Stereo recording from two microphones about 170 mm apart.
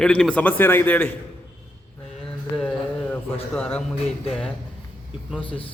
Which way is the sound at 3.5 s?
5° left (ahead or behind).